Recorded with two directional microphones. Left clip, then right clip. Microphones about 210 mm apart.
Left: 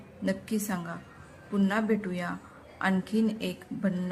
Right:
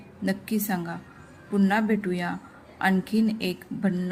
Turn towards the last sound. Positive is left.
turn(degrees=-5)  # may be behind; listen again after turning